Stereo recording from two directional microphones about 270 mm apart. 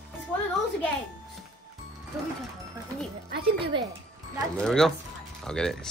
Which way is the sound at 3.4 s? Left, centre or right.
Centre.